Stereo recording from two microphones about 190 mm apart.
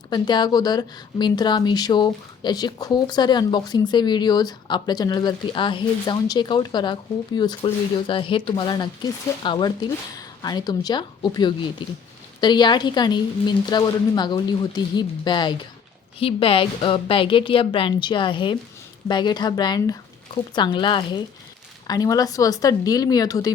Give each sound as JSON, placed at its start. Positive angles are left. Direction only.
{"t": 0.1, "sound": "a woman's voice", "side_deg": 25}